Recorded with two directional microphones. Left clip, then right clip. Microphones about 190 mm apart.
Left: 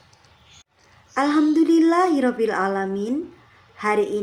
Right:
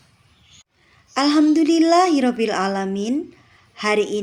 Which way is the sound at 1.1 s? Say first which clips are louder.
Right 2 dB; 35° right (ahead or behind).